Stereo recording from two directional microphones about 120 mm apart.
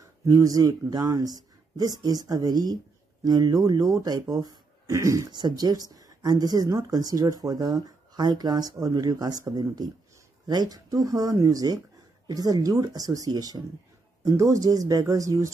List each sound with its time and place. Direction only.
0.0 s speech: 30° right (ahead or behind)